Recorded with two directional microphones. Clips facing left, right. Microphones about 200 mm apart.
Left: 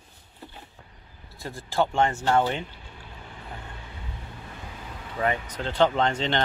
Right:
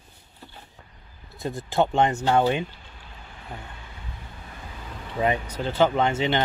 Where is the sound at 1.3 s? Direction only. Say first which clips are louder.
Right 3 dB; 20° right (ahead or behind).